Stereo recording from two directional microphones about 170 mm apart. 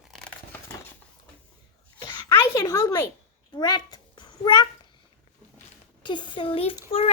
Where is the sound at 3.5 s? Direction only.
25° left (ahead or behind).